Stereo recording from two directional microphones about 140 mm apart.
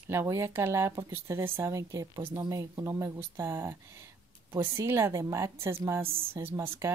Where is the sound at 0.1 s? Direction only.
20° right (ahead or behind).